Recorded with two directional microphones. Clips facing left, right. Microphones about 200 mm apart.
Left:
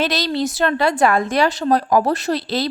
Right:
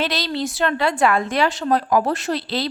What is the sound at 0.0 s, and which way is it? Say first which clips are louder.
A woman's voice: left 3 dB; 45° left (ahead or behind).